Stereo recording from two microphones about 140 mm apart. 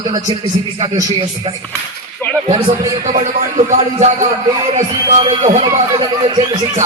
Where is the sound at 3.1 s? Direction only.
65° right (ahead or behind).